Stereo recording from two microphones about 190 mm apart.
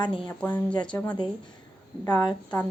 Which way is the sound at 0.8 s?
5° left (ahead or behind).